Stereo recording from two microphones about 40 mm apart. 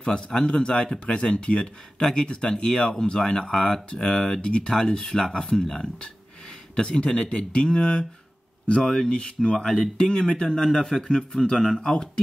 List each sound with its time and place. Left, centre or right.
0.0 s speech: centre